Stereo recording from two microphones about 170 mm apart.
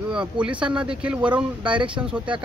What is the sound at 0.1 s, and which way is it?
Speech, 5° right (ahead or behind).